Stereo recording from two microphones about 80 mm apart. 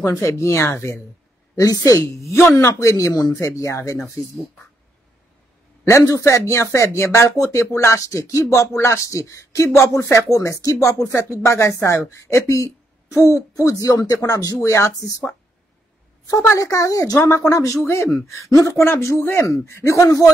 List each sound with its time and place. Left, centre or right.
0.0 s speech: left
1.5 s speech: left
3.3 s speech: left
6.2 s speech: left
16.3 s speech: left